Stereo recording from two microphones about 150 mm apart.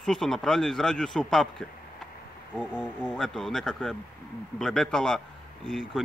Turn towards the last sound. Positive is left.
turn(degrees=0)  # may be behind; listen again after turning